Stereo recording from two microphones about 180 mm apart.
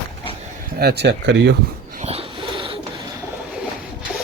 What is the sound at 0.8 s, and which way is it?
Speech, 65° right (ahead or behind).